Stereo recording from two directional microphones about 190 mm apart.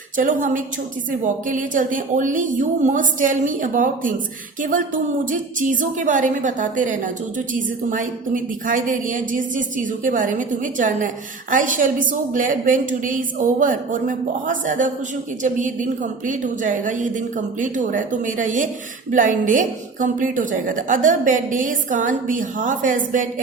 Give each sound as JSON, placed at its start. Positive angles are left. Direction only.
{"t": 0.2, "sound": "a woman's voice", "side_deg": -45}
{"t": 5.2, "sound": "a woman's voice", "side_deg": -45}